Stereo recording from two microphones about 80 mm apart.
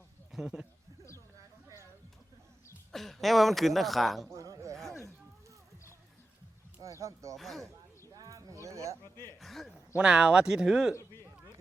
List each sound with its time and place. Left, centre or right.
0.3 s speech: centre
2.9 s speech: centre
4.3 s a sound: right
7.0 s speech: right
7.3 s a man's voice: centre
8.1 s a sound: right
9.4 s a man's voice: centre
9.9 s speech: centre